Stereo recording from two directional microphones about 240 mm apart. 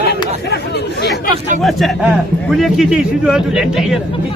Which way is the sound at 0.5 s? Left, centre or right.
Left.